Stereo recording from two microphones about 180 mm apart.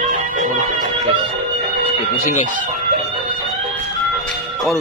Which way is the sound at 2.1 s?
45° left (ahead or behind).